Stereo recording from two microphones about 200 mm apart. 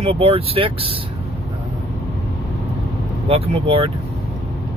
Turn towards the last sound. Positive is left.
turn(degrees=-30)  # may be behind; listen again after turning